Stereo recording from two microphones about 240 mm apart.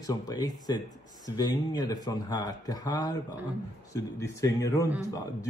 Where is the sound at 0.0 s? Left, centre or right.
Centre.